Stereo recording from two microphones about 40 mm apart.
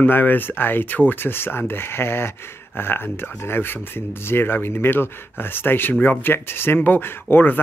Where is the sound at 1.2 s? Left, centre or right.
Left.